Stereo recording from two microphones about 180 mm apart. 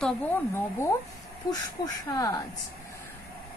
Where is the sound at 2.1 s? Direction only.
20° left (ahead or behind).